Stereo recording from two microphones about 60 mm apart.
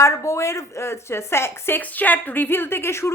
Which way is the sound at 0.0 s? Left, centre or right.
Left.